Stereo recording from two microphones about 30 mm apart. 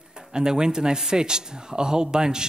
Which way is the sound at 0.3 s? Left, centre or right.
Right.